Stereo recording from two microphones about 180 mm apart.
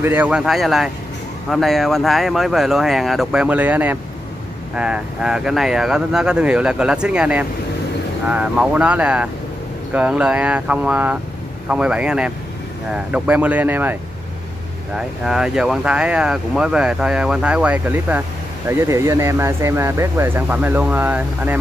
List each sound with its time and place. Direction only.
0.0 s speech: 10° right (ahead or behind)
15.0 s speech: 5° right (ahead or behind)